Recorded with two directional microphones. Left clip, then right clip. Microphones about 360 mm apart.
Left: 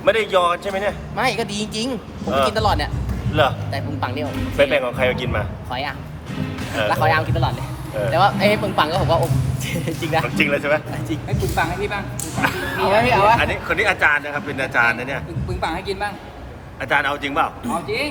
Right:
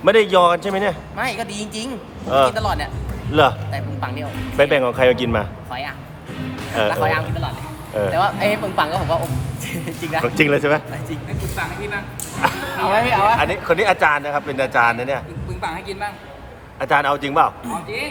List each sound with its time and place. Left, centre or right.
0.0 s a man's voice: right
1.1 s a man's voice: centre
4.5 s a man's voice: right
6.8 s a man's voice: centre
10.2 s a man's voice: right
10.9 s speech: centre
12.4 s a man's voice: centre
12.8 s a man's voice: centre
13.4 s a man's voice: centre
15.6 s a man's voice: centre
16.8 s a man's voice: centre
17.8 s a man's voice: centre